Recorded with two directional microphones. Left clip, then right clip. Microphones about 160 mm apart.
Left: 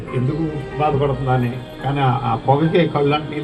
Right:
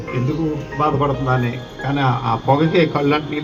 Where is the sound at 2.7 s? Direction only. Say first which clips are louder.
Even; 30° right (ahead or behind).